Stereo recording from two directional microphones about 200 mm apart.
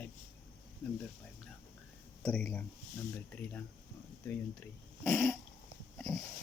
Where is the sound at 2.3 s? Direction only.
5° left (ahead or behind).